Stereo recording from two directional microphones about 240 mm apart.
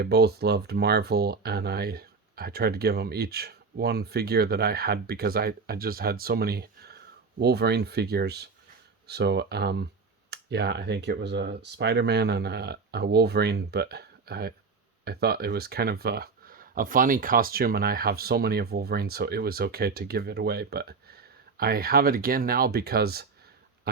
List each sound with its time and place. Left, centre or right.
0.0 s speech: right